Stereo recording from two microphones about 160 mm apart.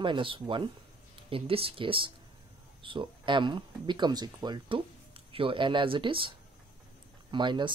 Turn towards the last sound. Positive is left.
turn(degrees=-30)  # may be behind; listen again after turning